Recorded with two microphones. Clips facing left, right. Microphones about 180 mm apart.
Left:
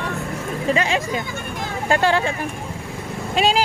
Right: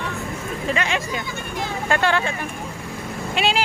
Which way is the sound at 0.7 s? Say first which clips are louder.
Left 4 dB; 30° left (ahead or behind).